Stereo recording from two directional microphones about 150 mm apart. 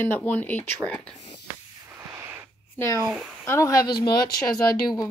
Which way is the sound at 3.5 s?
20° left (ahead or behind).